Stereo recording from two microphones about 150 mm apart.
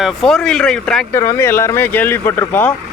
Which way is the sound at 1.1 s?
15° left (ahead or behind).